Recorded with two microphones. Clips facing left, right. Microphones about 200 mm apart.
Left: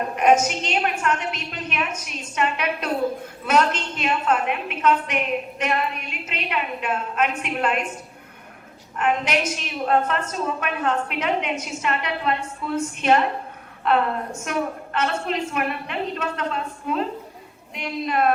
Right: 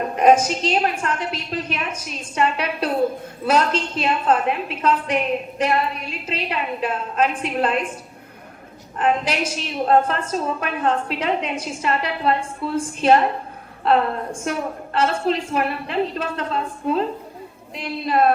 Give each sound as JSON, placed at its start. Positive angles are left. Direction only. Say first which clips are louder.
{"t": 0.2, "sound": "a woman's voice", "louder": "right 3 dB", "side_deg": -35}
{"t": 9.0, "sound": "a woman's voice", "louder": "right 2 dB", "side_deg": -30}